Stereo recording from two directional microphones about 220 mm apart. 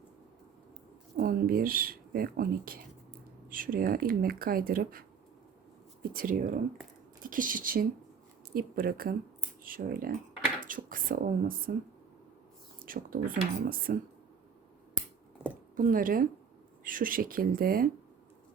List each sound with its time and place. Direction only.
1.1 s speech: 40° right (ahead or behind)
12.8 s speech: 40° right (ahead or behind)
15.7 s speech: 40° right (ahead or behind)